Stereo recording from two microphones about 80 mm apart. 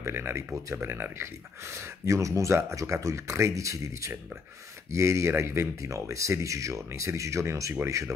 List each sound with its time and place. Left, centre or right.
0.0 s speech: right